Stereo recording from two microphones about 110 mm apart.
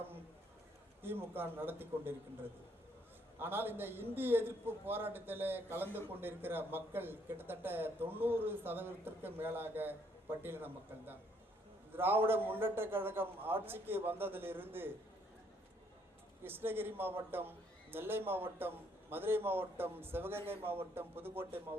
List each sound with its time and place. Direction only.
1.0 s a man's voice: 20° right (ahead or behind)
3.3 s a man's voice: 20° right (ahead or behind)
16.4 s a man's voice: 20° right (ahead or behind)